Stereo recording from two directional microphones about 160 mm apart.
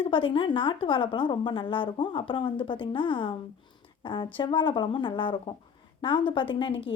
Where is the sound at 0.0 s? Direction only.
30° left (ahead or behind).